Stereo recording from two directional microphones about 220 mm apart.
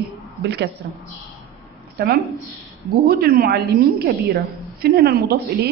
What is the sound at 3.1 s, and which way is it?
A man's voice, 45° right (ahead or behind).